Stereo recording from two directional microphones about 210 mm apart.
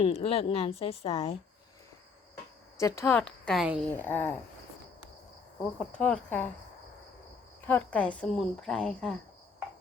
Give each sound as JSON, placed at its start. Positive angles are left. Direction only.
{"t": 0.0, "sound": "a woman's voice", "side_deg": 30}
{"t": 2.7, "sound": "a woman's voice", "side_deg": 15}
{"t": 6.0, "sound": "a woman's voice", "side_deg": 10}
{"t": 7.7, "sound": "a woman's voice", "side_deg": 5}